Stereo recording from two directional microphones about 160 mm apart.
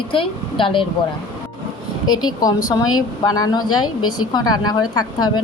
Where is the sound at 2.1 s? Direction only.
25° left (ahead or behind).